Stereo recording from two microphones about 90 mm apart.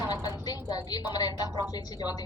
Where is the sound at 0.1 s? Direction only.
50° left (ahead or behind).